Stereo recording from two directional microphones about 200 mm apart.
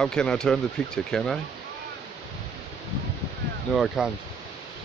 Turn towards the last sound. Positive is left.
turn(degrees=-5)  # may be behind; listen again after turning